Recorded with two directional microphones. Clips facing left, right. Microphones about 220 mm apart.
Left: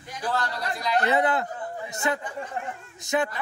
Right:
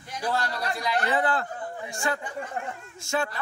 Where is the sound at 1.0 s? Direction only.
20° left (ahead or behind).